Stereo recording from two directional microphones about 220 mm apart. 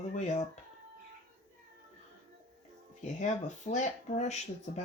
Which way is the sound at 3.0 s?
35° left (ahead or behind).